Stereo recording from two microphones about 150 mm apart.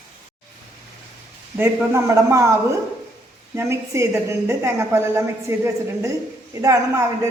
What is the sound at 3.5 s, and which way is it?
A woman's voice, 20° right (ahead or behind).